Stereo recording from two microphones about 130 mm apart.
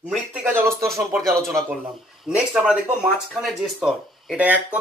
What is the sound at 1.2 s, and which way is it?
Speech, centre (ahead or behind).